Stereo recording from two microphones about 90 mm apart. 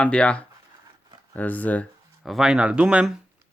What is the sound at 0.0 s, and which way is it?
Speech, 10° left (ahead or behind).